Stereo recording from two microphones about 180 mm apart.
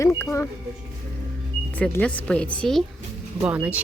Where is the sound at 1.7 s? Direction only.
5° left (ahead or behind).